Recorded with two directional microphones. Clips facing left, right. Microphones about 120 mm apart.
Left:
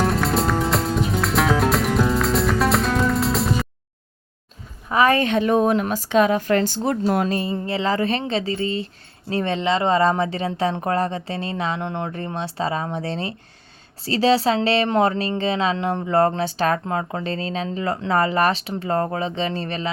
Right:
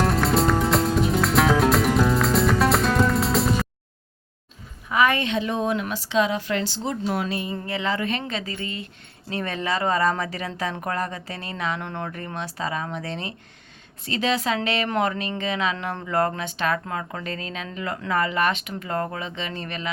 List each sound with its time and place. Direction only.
0.0 s music: centre (ahead or behind)
4.9 s a woman's voice: 35° left (ahead or behind)
5.3 s speech: 50° left (ahead or behind); by 19.9 s 30° left (ahead or behind)